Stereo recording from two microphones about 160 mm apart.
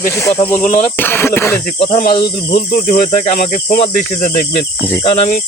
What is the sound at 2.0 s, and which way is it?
Speech, 70° left (ahead or behind).